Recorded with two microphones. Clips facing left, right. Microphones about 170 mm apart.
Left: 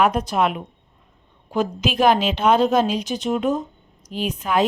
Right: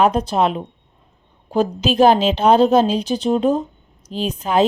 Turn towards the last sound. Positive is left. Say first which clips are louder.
# right 3 dB
turn(degrees=-30)  # may be behind; listen again after turning